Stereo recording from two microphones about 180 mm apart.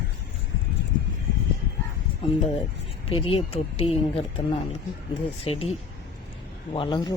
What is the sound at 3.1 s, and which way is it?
Speech, 30° left (ahead or behind).